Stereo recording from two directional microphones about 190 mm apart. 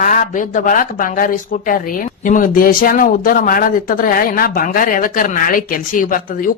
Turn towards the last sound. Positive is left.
turn(degrees=45)  # may be behind; listen again after turning